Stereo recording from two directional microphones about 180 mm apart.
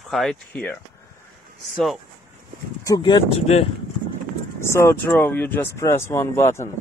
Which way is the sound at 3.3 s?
35° left (ahead or behind).